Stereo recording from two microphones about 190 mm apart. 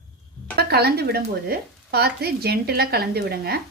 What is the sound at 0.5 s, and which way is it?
Speech, 55° right (ahead or behind).